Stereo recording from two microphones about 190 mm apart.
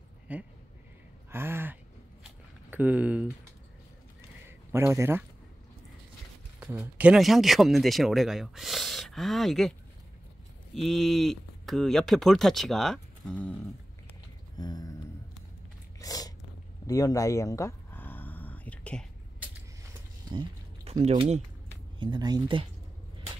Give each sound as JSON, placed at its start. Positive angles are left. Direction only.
{"t": 0.3, "sound": "speech", "side_deg": -5}
{"t": 1.3, "sound": "gasp", "side_deg": -10}
{"t": 2.7, "sound": "speech", "side_deg": -10}
{"t": 4.5, "sound": "a man's voice", "side_deg": -15}
{"t": 6.6, "sound": "speech", "side_deg": -10}
{"t": 14.6, "sound": "a sound", "side_deg": 20}
{"t": 16.0, "sound": "sneeze", "side_deg": 20}
{"t": 16.8, "sound": "a sound", "side_deg": 20}
{"t": 20.2, "sound": "a sound", "side_deg": -30}
{"t": 22.0, "sound": "speech", "side_deg": -20}